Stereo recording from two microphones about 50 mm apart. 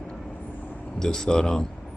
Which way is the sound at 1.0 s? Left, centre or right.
Centre.